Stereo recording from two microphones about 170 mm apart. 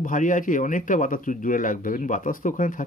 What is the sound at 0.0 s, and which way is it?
Speech, 50° left (ahead or behind).